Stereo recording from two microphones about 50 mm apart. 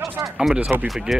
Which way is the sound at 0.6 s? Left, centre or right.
Right.